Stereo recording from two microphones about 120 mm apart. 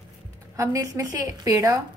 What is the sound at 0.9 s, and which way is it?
Speech, 30° right (ahead or behind).